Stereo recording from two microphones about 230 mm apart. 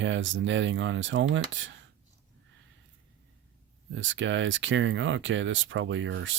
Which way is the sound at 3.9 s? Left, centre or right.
Right.